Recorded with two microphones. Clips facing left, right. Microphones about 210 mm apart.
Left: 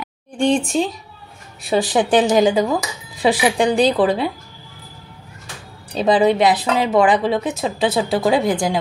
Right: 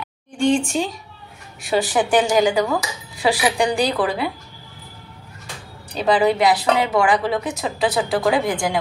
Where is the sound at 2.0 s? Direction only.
20° left (ahead or behind).